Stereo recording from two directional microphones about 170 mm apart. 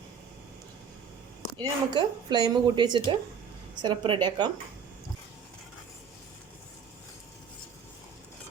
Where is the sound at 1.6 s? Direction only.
25° right (ahead or behind).